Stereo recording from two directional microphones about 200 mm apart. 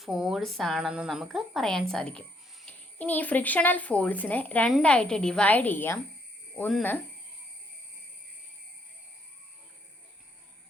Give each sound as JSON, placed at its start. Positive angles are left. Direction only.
{"t": 0.0, "sound": "speech", "side_deg": 0}